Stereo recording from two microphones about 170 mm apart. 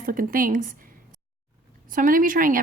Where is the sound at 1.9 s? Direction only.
55° right (ahead or behind).